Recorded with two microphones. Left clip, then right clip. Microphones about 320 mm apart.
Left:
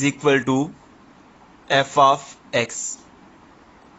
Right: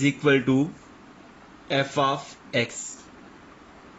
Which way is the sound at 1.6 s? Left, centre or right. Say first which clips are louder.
Left 8 dB; centre.